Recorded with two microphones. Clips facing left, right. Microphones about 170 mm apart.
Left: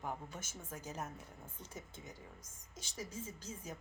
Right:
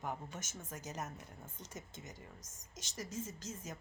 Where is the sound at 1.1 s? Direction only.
10° left (ahead or behind).